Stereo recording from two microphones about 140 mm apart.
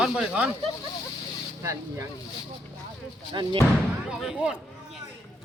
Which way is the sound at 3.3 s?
35° right (ahead or behind).